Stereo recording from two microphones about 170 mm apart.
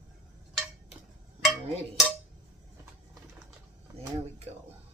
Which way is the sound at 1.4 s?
Centre (ahead or behind).